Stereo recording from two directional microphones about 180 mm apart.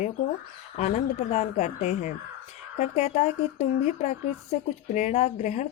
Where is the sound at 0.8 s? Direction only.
40° left (ahead or behind).